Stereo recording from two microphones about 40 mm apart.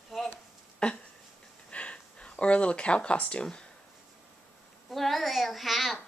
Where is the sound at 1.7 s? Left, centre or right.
Left.